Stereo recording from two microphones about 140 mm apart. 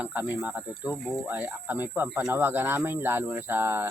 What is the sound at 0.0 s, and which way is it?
Snake, 10° right (ahead or behind).